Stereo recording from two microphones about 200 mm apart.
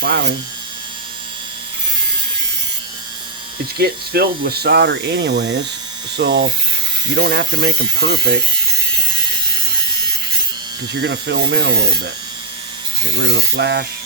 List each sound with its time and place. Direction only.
0.0 s speech: 60° right (ahead or behind)
3.8 s speech: 50° right (ahead or behind)
11.0 s speech: 60° right (ahead or behind)
13.1 s speech: 60° right (ahead or behind)